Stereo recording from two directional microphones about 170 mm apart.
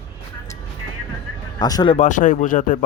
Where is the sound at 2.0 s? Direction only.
45° left (ahead or behind).